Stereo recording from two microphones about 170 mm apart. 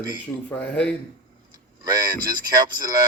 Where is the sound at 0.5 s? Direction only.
5° left (ahead or behind).